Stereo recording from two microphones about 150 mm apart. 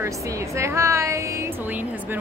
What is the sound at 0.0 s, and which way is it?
Speech, 20° right (ahead or behind).